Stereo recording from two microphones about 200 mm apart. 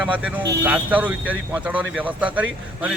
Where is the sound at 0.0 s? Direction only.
5° right (ahead or behind).